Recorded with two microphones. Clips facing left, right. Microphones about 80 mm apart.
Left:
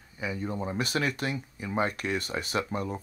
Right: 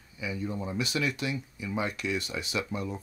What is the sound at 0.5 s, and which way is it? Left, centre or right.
Speech, left.